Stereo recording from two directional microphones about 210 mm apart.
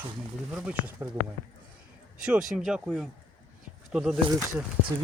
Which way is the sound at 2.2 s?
5° right (ahead or behind).